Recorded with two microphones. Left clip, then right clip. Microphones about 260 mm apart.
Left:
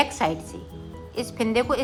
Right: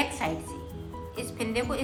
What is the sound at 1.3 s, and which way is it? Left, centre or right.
Speech, left.